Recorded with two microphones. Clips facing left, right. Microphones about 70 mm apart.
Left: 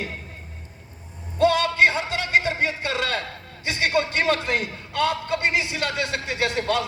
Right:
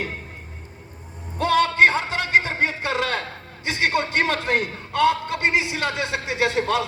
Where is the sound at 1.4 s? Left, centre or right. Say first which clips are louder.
Right 1 dB; right.